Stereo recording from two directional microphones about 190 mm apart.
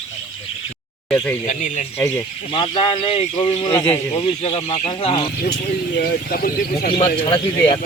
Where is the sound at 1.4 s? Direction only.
40° left (ahead or behind).